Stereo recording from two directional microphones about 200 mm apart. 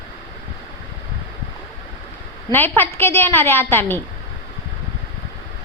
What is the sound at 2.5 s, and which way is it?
A woman's voice, 10° left (ahead or behind).